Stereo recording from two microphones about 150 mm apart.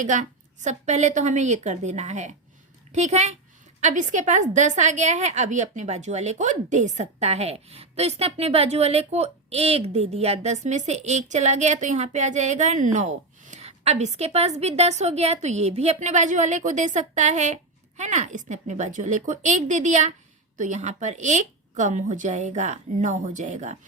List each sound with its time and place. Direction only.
0.0 s a woman's voice: 55° right (ahead or behind)